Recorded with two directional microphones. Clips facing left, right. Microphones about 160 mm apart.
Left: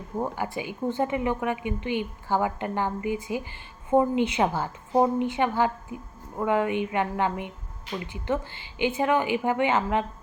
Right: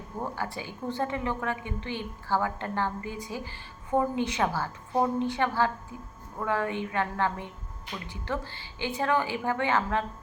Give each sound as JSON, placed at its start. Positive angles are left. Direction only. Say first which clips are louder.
{"t": 0.2, "sound": "a woman's voice", "louder": "left 4 dB", "side_deg": 20}